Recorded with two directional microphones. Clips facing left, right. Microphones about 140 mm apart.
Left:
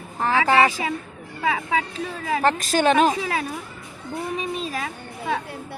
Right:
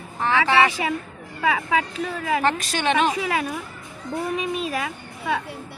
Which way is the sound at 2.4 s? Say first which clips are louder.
Left 3 dB; 40° left (ahead or behind).